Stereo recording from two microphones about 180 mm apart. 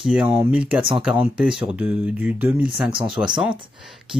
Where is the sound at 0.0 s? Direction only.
5° right (ahead or behind).